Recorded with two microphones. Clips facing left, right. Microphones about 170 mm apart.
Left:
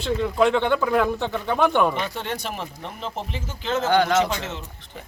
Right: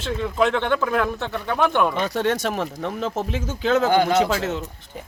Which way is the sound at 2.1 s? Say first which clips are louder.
Right 8 dB; 85° right.